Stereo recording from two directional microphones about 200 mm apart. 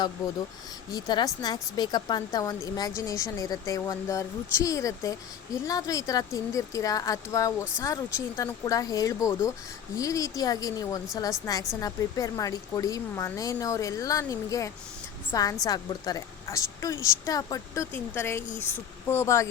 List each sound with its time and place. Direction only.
0.9 s speech: 20° left (ahead or behind)